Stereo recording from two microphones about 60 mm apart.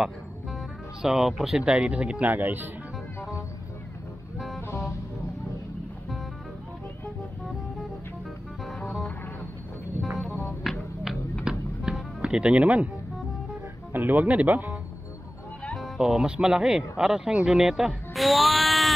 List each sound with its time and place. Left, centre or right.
1.0 s speech: centre
2.3 s speech: right
3.2 s music: left
4.6 s music: left
10.0 s music: centre
11.5 s music: centre
12.2 s speech: centre
13.9 s speech: right
16.0 s speech: centre